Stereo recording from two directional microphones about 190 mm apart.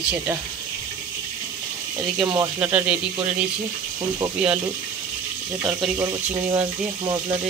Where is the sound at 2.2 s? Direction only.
20° right (ahead or behind).